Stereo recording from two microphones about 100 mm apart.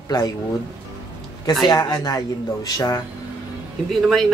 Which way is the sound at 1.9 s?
40° left (ahead or behind).